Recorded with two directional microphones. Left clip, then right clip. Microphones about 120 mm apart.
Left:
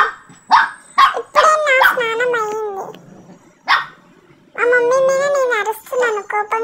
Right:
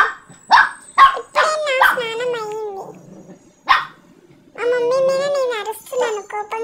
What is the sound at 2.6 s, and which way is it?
Cat, 40° left (ahead or behind).